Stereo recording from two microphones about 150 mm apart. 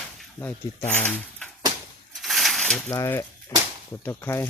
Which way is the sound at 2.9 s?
20° left (ahead or behind).